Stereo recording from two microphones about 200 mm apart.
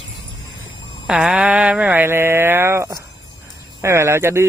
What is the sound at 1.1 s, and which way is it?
Speech, 5° right (ahead or behind).